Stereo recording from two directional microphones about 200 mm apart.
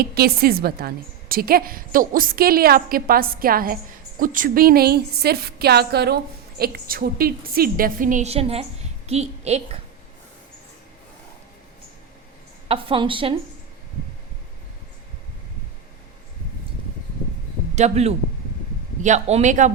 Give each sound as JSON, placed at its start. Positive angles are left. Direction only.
{"t": 0.0, "sound": "a woman's voice", "side_deg": -50}
{"t": 12.6, "sound": "speech", "side_deg": -25}
{"t": 17.7, "sound": "a man's voice", "side_deg": -35}